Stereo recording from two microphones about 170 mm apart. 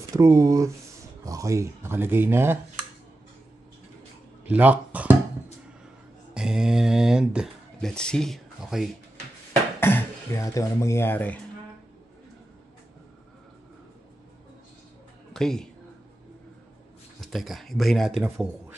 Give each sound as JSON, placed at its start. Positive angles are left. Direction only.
{"t": 0.1, "sound": "speech", "side_deg": -20}
{"t": 4.5, "sound": "speech", "side_deg": -10}
{"t": 6.3, "sound": "speech", "side_deg": -5}
{"t": 9.8, "sound": "speech", "side_deg": 15}
{"t": 15.3, "sound": "speech", "side_deg": 5}
{"t": 17.2, "sound": "speech", "side_deg": 0}